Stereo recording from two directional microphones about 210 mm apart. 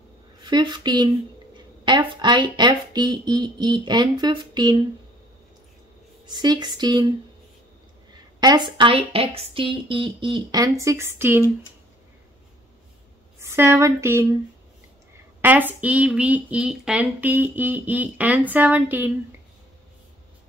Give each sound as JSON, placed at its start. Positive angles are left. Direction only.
{"t": 0.4, "sound": "a woman's voice", "side_deg": -20}
{"t": 6.2, "sound": "a woman's voice", "side_deg": -20}
{"t": 8.4, "sound": "a woman's voice", "side_deg": -20}
{"t": 13.4, "sound": "a woman's voice", "side_deg": -15}
{"t": 15.4, "sound": "speech", "side_deg": -10}